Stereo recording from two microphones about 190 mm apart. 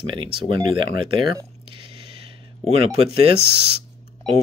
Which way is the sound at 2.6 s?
30° right (ahead or behind).